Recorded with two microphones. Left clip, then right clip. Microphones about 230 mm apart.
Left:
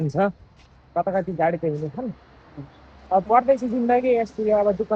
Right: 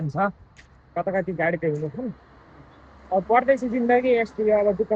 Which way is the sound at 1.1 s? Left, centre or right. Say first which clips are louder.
Left 1 dB; centre.